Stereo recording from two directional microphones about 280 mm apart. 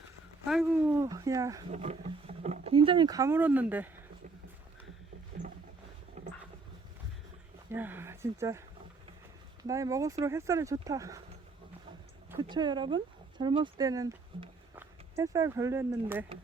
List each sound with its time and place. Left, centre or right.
0.4 s speech: centre
1.7 s speech: right; by 3.8 s centre
6.2 s vehicle: right
7.7 s speech: centre
9.6 s speech: centre
12.3 s speech: centre